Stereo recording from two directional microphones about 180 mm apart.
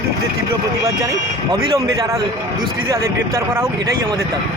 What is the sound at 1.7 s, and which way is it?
Speech, 20° right (ahead or behind).